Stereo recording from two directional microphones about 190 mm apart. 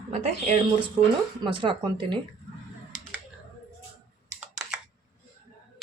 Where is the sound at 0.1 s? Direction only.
35° right (ahead or behind).